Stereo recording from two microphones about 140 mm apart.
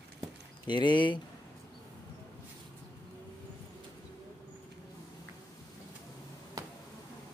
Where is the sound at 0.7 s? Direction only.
35° left (ahead or behind).